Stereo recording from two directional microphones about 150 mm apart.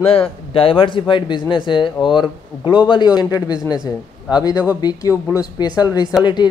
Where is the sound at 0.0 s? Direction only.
40° left (ahead or behind).